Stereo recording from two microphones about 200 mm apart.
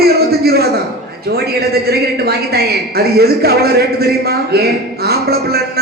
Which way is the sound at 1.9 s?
50° right (ahead or behind).